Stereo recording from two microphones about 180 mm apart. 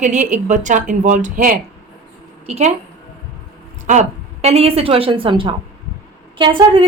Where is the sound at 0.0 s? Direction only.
40° right (ahead or behind).